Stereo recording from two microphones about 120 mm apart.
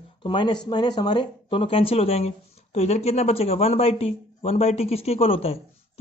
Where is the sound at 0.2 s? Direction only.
45° left (ahead or behind).